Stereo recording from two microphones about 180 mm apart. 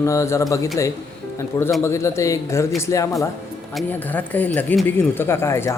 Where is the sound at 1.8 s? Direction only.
15° left (ahead or behind).